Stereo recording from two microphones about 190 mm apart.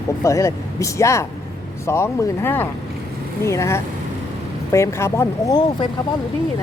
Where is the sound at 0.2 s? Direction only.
15° left (ahead or behind).